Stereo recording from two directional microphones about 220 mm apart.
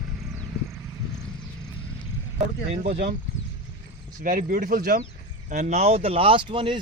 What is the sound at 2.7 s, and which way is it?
Speech, 30° right (ahead or behind).